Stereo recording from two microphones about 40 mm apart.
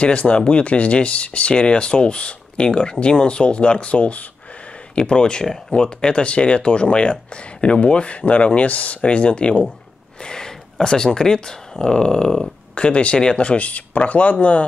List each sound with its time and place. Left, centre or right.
0.0 s speech: left
4.9 s speech: left
10.2 s speech: centre